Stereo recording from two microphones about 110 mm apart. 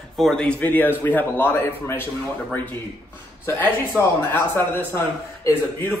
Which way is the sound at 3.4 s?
20° left (ahead or behind).